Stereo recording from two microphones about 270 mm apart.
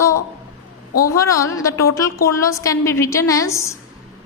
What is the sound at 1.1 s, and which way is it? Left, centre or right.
A woman's voice, centre.